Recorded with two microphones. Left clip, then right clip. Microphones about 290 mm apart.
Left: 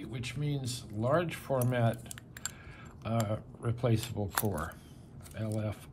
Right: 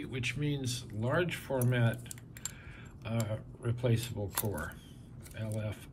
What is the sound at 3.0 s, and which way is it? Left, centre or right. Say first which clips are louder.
A man's voice: left 4 dB; centre.